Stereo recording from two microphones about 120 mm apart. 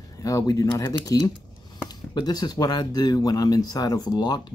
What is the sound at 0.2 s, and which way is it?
Speech, 30° left (ahead or behind).